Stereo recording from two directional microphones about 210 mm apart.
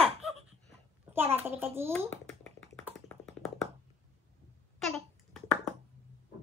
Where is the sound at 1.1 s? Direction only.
10° right (ahead or behind).